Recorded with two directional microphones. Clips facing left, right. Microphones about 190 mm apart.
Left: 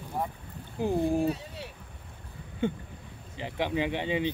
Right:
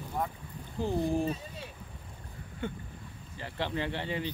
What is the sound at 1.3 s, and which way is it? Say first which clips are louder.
Speech: left 4 dB; 70° left (ahead or behind).